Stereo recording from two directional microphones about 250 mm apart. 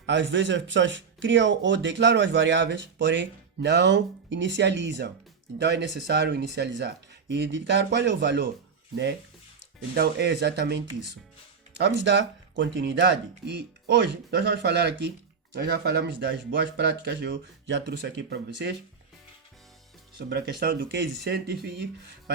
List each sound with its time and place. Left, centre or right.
0.0 s speech: right
9.9 s speech: right
20.1 s speech: right